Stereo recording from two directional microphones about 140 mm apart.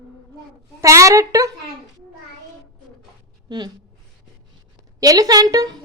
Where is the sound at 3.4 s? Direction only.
30° right (ahead or behind).